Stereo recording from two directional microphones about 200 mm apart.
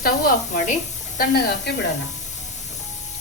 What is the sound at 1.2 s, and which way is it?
Speech, 55° left (ahead or behind).